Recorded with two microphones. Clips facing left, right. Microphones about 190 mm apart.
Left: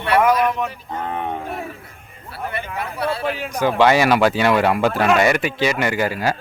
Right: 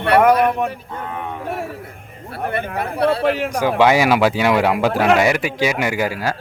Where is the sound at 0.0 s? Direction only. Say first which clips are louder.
Right 3 dB; 60° right (ahead or behind).